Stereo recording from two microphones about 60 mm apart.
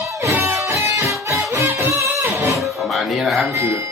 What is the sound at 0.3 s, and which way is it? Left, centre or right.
Music, right.